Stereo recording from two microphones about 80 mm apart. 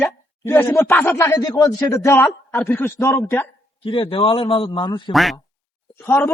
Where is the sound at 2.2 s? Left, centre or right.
Centre.